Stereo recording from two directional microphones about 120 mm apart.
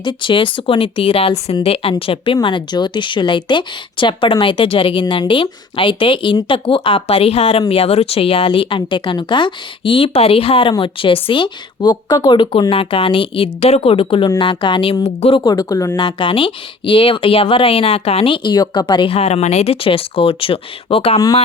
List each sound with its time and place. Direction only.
0.0 s speech: 40° left (ahead or behind)
15.0 s speech: 60° left (ahead or behind)
15.4 s speech: 30° left (ahead or behind)
16.0 s speech: 40° left (ahead or behind)
19.1 s speech: 65° left (ahead or behind)